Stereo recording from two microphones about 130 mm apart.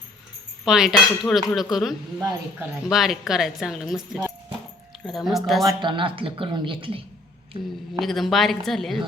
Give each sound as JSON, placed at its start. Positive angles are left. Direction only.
{"t": 0.6, "sound": "speech", "side_deg": -5}
{"t": 5.8, "sound": "speech", "side_deg": -40}
{"t": 7.9, "sound": "speech", "side_deg": 0}